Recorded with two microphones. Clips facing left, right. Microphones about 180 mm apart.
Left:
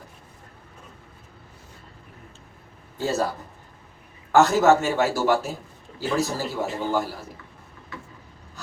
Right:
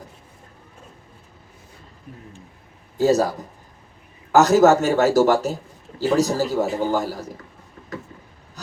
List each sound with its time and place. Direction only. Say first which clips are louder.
3.0 s a man's voice: right 8 dB; 40° right (ahead or behind)
4.4 s a man's voice: right 3 dB; 40° right (ahead or behind)